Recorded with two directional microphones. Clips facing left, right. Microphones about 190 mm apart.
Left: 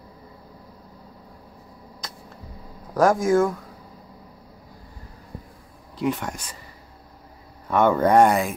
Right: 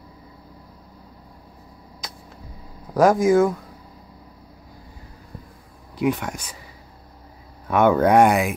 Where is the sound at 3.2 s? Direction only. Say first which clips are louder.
Right 3 dB; 5° right (ahead or behind).